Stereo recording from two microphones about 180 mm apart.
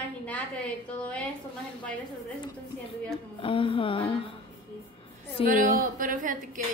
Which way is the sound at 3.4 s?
30° left (ahead or behind).